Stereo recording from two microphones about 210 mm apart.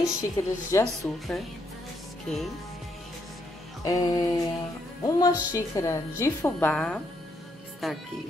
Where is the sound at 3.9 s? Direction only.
15° left (ahead or behind); by 8.0 s centre (ahead or behind).